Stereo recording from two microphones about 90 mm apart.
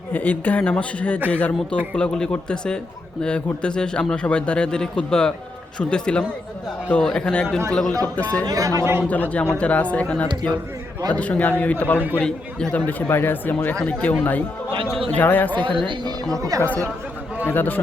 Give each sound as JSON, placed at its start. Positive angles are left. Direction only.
{"t": 0.1, "sound": "a man's voice", "side_deg": 20}
{"t": 8.4, "sound": "speech", "side_deg": -40}
{"t": 9.3, "sound": "a man's voice", "side_deg": 15}
{"t": 12.8, "sound": "a man's voice", "side_deg": 20}
{"t": 15.5, "sound": "speech", "side_deg": -65}
{"t": 16.6, "sound": "a man's voice", "side_deg": 20}